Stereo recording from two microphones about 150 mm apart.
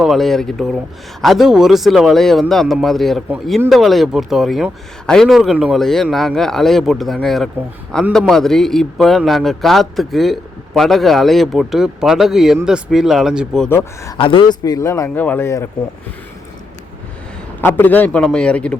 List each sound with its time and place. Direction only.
0.0 s a man's voice: centre (ahead or behind)
13.7 s a man's voice: 20° left (ahead or behind)
14.2 s a man's voice: 35° left (ahead or behind); by 15.7 s 15° left (ahead or behind)
17.6 s a man's voice: 10° left (ahead or behind)